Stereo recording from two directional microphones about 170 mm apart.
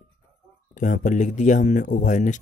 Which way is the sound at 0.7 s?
50° left (ahead or behind).